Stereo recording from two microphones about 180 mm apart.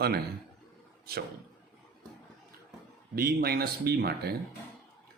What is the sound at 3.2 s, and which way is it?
Speech, 55° right (ahead or behind).